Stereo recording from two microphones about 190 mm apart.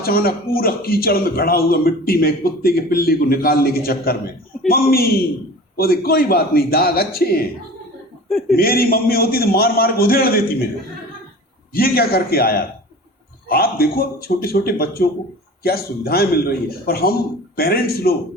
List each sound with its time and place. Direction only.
0.0 s speech: 50° left (ahead or behind)
8.3 s a man's voice: centre (ahead or behind)
8.5 s speech: 50° left (ahead or behind)
11.7 s speech: 50° left (ahead or behind)